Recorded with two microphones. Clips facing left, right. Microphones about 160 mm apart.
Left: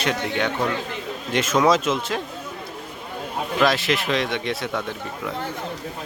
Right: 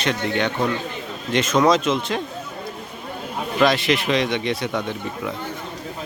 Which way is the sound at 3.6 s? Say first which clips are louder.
Right 2 dB; 5° left (ahead or behind).